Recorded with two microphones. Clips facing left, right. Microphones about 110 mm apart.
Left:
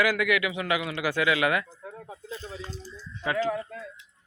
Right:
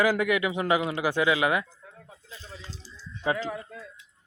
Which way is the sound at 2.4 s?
45° left (ahead or behind).